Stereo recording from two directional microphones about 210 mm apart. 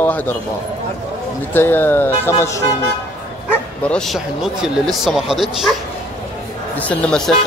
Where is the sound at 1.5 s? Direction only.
10° left (ahead or behind).